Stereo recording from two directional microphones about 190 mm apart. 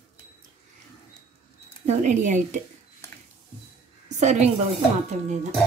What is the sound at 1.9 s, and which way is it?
Speech, 40° right (ahead or behind).